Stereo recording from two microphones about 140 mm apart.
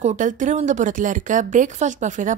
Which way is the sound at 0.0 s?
65° right (ahead or behind).